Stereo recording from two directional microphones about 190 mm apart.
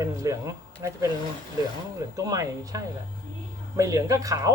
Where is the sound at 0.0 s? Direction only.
15° right (ahead or behind).